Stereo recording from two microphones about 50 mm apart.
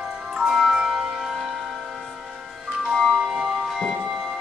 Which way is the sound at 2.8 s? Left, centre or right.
Centre.